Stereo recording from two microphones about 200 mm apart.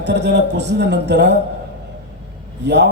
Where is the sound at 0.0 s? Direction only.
60° right (ahead or behind).